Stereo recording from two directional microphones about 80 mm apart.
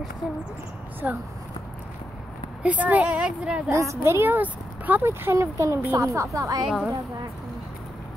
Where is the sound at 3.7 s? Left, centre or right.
Right.